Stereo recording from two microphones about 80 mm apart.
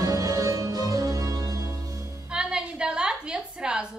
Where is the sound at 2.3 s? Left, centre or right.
Centre.